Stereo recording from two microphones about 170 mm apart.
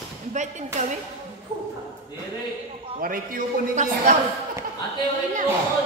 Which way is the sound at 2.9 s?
55° right (ahead or behind).